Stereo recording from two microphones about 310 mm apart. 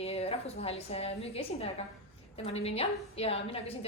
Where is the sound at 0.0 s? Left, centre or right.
Centre.